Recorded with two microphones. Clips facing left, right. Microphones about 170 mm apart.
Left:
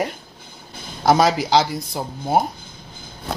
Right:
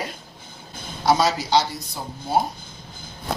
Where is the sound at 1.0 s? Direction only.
55° left (ahead or behind).